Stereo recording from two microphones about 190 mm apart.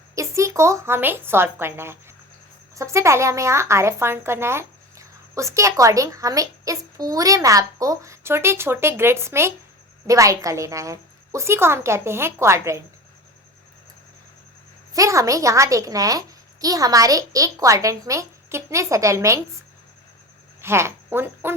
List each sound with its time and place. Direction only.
0.2 s a woman's voice: 15° right (ahead or behind)
14.9 s a woman's voice: 15° right (ahead or behind)
20.6 s speech: 15° right (ahead or behind)